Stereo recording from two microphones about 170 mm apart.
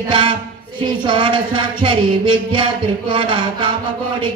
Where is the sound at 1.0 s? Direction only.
30° right (ahead or behind).